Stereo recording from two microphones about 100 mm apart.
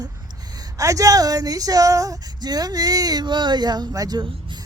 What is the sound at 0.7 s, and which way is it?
Speech, 35° right (ahead or behind).